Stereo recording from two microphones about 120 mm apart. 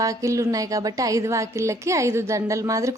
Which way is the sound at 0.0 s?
25° right (ahead or behind).